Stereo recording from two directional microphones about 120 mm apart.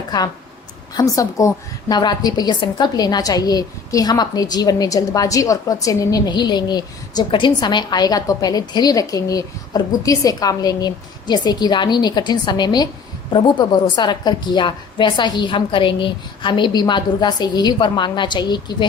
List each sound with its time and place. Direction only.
0.9 s a woman's voice: 30° left (ahead or behind)